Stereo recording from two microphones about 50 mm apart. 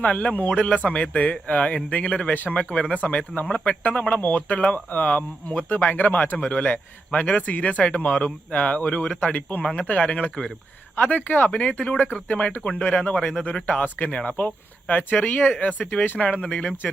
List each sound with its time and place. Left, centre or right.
0.0 s speech: left
4.2 s speech: left